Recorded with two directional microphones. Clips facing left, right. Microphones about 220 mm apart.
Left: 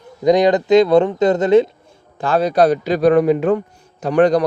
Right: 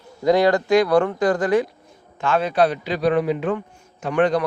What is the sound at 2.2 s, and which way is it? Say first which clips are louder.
A man's voice: left 4 dB; 35° left (ahead or behind).